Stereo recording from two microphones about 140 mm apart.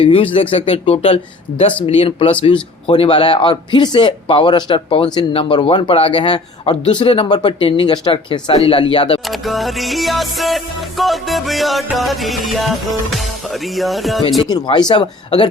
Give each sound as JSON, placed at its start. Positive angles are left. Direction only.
{"t": 0.0, "sound": "a man's voice", "side_deg": 40}
{"t": 9.2, "sound": "music", "side_deg": 0}
{"t": 14.4, "sound": "a man's voice", "side_deg": 30}